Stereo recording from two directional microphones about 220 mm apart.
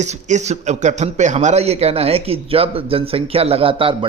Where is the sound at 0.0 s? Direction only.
30° right (ahead or behind).